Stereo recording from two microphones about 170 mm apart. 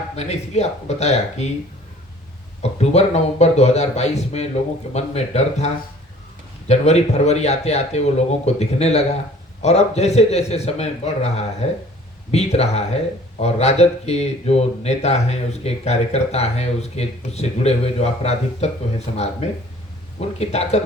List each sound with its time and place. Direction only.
0.2 s speech: 40° left (ahead or behind)
2.6 s speech: 40° left (ahead or behind)